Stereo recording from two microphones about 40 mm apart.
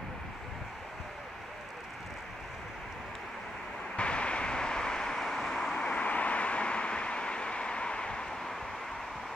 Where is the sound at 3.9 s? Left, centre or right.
Left.